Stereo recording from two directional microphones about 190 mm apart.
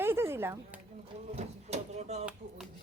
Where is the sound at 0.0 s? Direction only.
10° right (ahead or behind).